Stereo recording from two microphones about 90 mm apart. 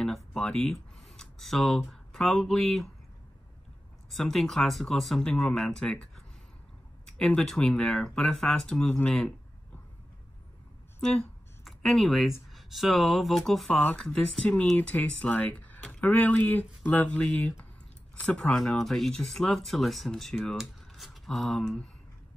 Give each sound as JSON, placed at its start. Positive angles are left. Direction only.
{"t": 0.0, "sound": "speech", "side_deg": 5}
{"t": 4.1, "sound": "speech", "side_deg": 0}
{"t": 8.8, "sound": "speech", "side_deg": 20}
{"t": 11.0, "sound": "speech", "side_deg": 5}